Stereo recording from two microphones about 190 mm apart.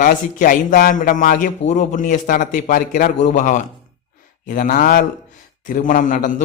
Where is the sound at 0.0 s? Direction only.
45° left (ahead or behind).